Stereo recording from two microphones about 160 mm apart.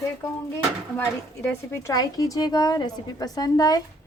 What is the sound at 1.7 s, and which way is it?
A woman's voice, 20° left (ahead or behind).